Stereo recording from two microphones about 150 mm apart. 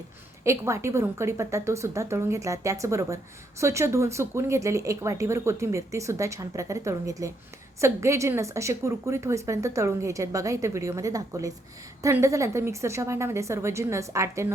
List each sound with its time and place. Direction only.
0.4 s speech: 20° right (ahead or behind)